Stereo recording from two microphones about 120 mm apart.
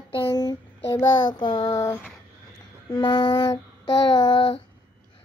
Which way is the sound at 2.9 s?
35° left (ahead or behind).